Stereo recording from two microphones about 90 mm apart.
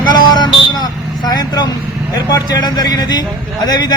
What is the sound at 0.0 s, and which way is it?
Vehicle, 55° left (ahead or behind).